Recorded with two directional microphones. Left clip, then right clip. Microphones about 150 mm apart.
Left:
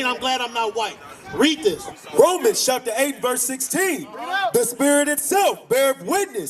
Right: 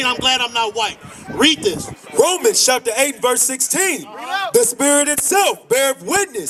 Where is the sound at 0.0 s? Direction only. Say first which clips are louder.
Right 5 dB; 15° right (ahead or behind).